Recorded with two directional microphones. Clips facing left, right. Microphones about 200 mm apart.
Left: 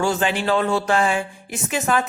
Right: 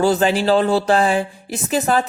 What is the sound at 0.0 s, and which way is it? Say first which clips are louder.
A man's voice: right 5 dB; 35° right (ahead or behind).